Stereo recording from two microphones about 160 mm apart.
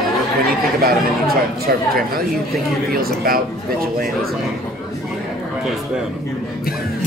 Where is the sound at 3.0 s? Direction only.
65° right (ahead or behind).